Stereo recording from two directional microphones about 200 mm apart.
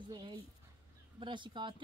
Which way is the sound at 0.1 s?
25° right (ahead or behind).